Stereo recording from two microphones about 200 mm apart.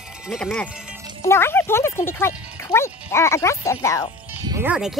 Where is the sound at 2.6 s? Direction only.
15° left (ahead or behind).